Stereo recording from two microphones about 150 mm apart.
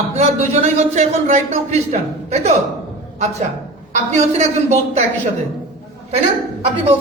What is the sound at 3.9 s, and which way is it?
A man's voice, 50° right (ahead or behind).